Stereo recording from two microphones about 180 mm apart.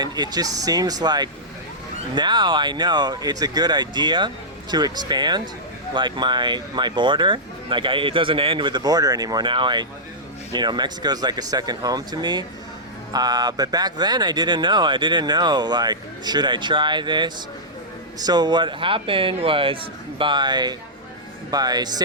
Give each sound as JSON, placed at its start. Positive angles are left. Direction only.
{"t": 0.0, "sound": "speech", "side_deg": -20}